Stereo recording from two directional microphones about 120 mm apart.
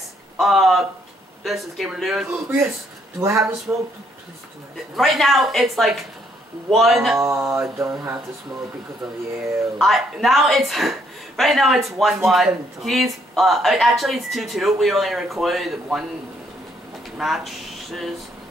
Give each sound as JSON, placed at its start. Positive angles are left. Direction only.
{"t": 0.4, "sound": "speech", "side_deg": 0}
{"t": 3.2, "sound": "mantra", "side_deg": -25}
{"t": 4.9, "sound": "speech", "side_deg": 0}
{"t": 7.2, "sound": "mantra", "side_deg": -25}
{"t": 9.8, "sound": "speech", "side_deg": 0}
{"t": 17.2, "sound": "speech", "side_deg": 0}